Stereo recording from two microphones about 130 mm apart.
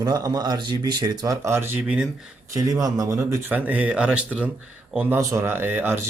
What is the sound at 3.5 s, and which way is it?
Speech, 10° right (ahead or behind).